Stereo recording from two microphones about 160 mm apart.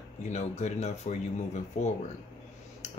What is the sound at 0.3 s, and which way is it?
Speech, 45° left (ahead or behind).